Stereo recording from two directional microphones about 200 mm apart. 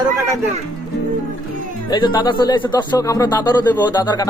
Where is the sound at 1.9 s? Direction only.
20° left (ahead or behind).